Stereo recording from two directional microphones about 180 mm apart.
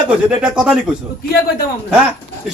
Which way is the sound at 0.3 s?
5° right (ahead or behind).